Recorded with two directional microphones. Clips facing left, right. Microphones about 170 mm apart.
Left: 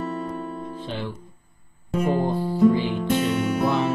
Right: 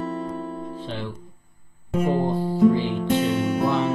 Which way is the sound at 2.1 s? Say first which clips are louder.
Even; 25° right (ahead or behind).